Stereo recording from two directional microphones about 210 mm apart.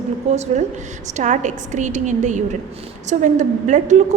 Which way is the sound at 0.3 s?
35° right (ahead or behind).